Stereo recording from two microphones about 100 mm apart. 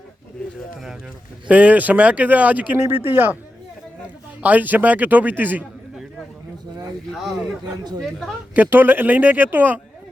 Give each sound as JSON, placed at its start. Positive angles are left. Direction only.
{"t": 1.5, "sound": "speech", "side_deg": -15}
{"t": 4.4, "sound": "speech", "side_deg": -15}
{"t": 8.5, "sound": "speech", "side_deg": -20}